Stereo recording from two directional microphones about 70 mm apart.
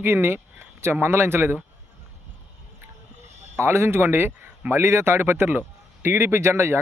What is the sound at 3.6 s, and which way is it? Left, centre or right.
Speech, right.